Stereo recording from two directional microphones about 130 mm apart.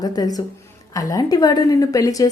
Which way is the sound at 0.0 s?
30° left (ahead or behind).